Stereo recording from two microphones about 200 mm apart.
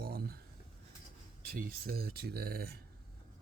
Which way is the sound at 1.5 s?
50° right (ahead or behind).